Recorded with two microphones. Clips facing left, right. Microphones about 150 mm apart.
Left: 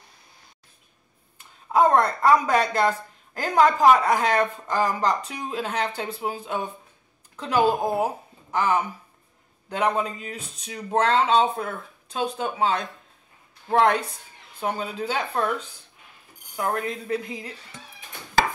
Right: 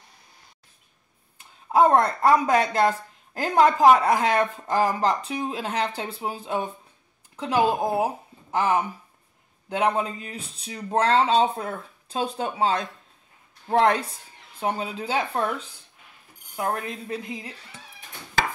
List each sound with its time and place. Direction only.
1.7 s speech: 30° right (ahead or behind)
16.5 s speech: 25° right (ahead or behind)